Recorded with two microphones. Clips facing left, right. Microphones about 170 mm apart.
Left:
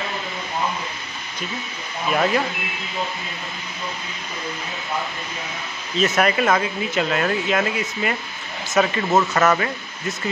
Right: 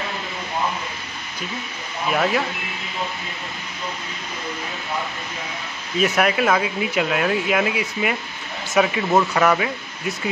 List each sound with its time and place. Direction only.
2.1 s speech: centre (ahead or behind)
5.9 s speech: 10° right (ahead or behind)